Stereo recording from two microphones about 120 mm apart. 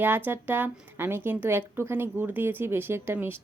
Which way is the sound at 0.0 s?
15° right (ahead or behind).